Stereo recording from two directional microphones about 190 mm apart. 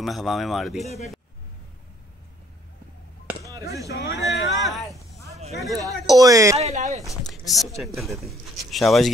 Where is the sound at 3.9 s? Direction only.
60° left (ahead or behind).